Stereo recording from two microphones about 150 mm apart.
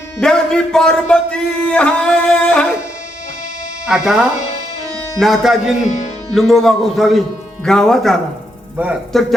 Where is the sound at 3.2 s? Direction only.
50° left (ahead or behind).